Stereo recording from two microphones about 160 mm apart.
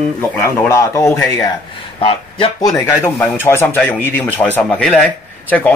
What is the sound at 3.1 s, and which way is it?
A man's voice, 10° left (ahead or behind).